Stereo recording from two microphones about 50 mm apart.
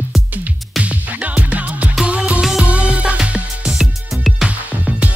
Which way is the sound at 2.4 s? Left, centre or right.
Centre.